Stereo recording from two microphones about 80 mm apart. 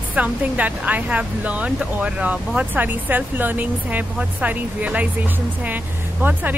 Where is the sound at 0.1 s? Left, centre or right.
Centre.